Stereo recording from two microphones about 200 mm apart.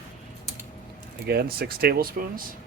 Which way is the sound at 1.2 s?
50° right (ahead or behind).